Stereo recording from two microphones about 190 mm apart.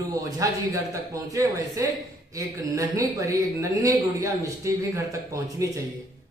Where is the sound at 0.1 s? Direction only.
15° right (ahead or behind).